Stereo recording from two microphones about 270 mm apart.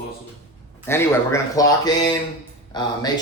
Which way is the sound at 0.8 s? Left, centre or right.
Centre.